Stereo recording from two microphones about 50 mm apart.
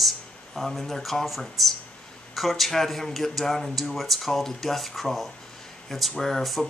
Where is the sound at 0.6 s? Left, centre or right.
Centre.